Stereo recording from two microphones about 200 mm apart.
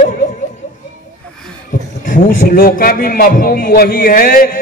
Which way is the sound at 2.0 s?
40° left (ahead or behind).